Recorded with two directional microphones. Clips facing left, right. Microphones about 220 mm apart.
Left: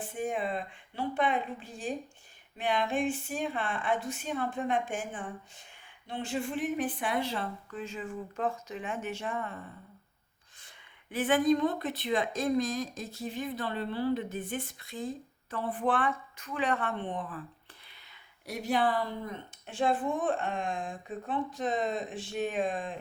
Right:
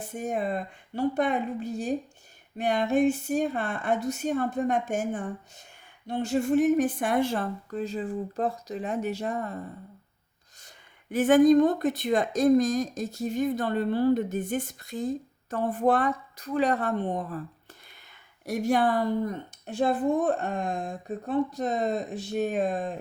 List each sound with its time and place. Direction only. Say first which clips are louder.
0.0 s speech: right 3 dB; 40° right (ahead or behind)
11.1 s speech: right 8 dB; 45° right (ahead or behind)
18.4 s speech: right 5 dB; 45° right (ahead or behind)